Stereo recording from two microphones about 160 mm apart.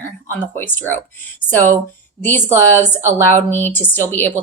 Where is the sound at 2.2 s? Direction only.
10° left (ahead or behind).